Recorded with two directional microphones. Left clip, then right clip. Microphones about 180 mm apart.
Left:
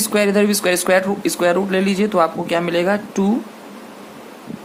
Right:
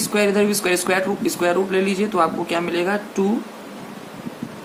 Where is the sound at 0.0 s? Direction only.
50° left (ahead or behind).